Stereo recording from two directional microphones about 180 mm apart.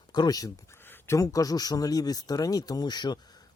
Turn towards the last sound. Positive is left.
turn(degrees=25)  # may be behind; listen again after turning